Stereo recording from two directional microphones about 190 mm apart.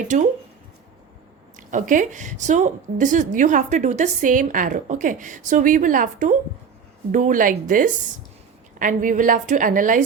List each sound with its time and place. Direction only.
1.5 s a woman's voice: 45° right (ahead or behind)